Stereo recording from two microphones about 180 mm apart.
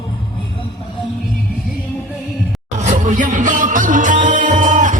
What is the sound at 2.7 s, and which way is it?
Music, 45° right (ahead or behind).